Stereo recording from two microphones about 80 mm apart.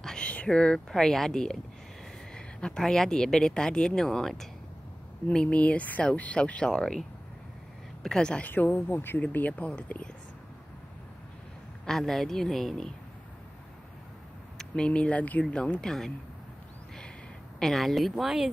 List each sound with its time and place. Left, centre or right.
0.0 s speech: centre
8.5 s speech: left
11.8 s a woman's voice: centre
14.6 s speech: centre
17.6 s a woman's voice: centre